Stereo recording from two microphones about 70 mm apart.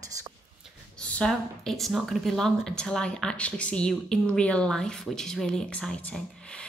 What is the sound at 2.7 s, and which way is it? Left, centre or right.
A woman's voice, centre.